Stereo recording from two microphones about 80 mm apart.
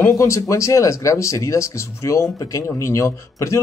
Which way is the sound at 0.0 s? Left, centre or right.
Left.